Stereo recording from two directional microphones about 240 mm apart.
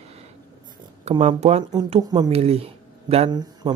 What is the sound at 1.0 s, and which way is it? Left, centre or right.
Speech, right.